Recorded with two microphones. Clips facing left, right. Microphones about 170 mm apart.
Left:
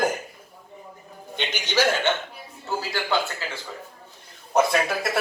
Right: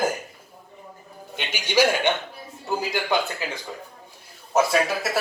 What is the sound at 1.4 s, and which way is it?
Speech, 10° right (ahead or behind).